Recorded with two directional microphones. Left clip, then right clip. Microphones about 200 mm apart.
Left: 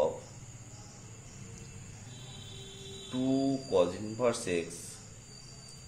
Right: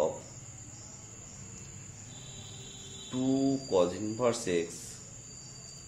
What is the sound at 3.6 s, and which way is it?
Speech, 25° right (ahead or behind).